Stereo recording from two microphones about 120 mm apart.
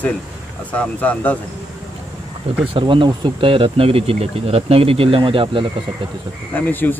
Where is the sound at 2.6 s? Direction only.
45° right (ahead or behind).